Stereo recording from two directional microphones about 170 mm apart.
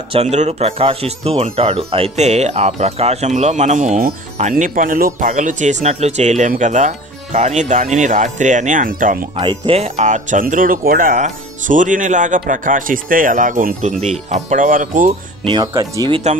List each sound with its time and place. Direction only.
0.1 s speech: 40° right (ahead or behind); by 9.3 s 55° right (ahead or behind)
9.4 s speech: 30° right (ahead or behind); by 15.1 s 55° right (ahead or behind)
15.4 s speech: 25° right (ahead or behind)